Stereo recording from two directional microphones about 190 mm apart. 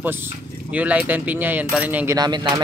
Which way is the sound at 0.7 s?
5° right (ahead or behind).